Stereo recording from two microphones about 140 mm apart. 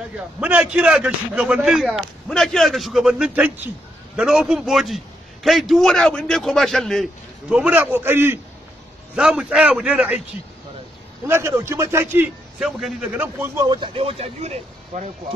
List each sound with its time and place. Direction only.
0.4 s a man's voice: 10° right (ahead or behind)
9.1 s a man's voice: 5° right (ahead or behind)
11.2 s a man's voice: 15° right (ahead or behind)
12.5 s a man's voice: 5° right (ahead or behind)
13.6 s speech: 30° right (ahead or behind)
13.9 s speech: 45° right (ahead or behind)